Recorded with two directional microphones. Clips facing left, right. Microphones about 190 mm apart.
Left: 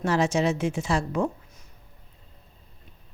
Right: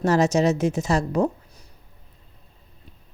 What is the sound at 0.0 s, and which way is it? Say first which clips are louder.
Speech: right 4 dB; 40° right (ahead or behind).